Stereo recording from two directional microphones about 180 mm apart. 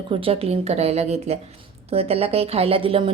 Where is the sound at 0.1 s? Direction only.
30° right (ahead or behind).